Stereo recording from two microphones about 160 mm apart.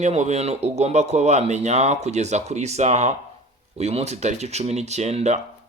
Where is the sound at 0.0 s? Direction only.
45° right (ahead or behind).